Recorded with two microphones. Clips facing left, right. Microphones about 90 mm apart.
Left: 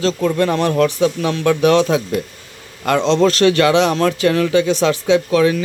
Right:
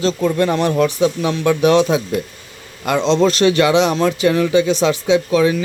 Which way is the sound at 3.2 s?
20° right (ahead or behind).